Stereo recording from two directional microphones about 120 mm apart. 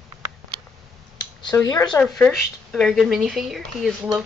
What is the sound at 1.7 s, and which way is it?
Speech, 35° left (ahead or behind).